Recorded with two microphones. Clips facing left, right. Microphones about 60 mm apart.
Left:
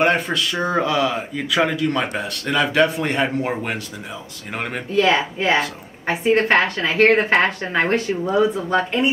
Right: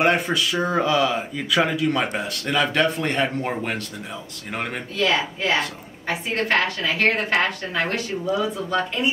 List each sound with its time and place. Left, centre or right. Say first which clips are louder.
0.0 s speech: left 1 dB; centre
4.9 s a woman's voice: left 5 dB; left